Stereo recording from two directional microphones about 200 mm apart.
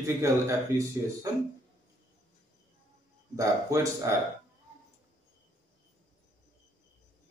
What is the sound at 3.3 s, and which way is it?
Speech, 15° right (ahead or behind).